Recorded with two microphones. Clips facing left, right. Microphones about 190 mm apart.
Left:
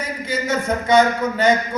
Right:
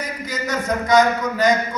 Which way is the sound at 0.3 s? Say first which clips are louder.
Left 2 dB; 25° left (ahead or behind).